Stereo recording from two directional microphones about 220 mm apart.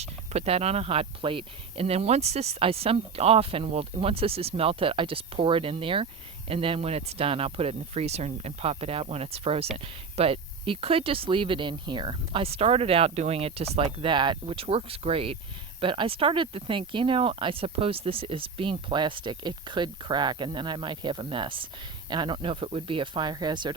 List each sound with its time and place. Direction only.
0.0 s speech: 30° right (ahead or behind)